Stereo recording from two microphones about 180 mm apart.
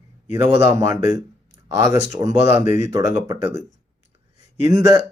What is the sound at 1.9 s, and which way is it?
Speech, 20° right (ahead or behind).